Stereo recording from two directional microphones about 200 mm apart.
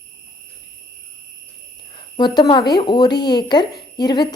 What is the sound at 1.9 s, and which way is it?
Speech, 25° left (ahead or behind).